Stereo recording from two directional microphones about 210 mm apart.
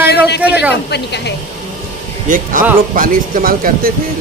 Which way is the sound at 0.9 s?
55° left (ahead or behind).